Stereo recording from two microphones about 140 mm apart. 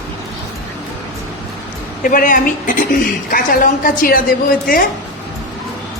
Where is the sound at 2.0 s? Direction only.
80° left.